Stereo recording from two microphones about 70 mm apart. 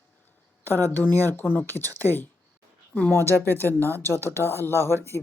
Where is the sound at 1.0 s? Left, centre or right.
Left.